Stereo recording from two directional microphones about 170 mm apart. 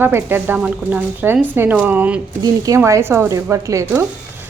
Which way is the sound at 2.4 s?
20° right (ahead or behind).